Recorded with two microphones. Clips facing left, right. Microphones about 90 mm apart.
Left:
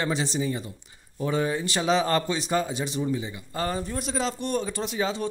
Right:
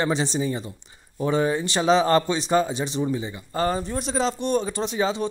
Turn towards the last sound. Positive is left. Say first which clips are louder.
# right 4 dB
turn(degrees=-30)  # may be behind; listen again after turning